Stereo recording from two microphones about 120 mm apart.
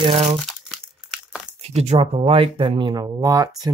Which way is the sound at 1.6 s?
60° right (ahead or behind).